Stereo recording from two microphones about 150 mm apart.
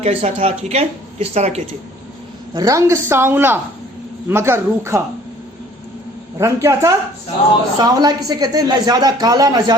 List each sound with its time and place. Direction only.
0.0 s speech: 40° right (ahead or behind)
2.5 s a woman's voice: 25° right (ahead or behind)
6.4 s speech: 20° right (ahead or behind)